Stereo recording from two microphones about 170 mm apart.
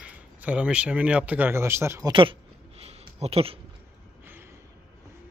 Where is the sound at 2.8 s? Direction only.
35° right (ahead or behind).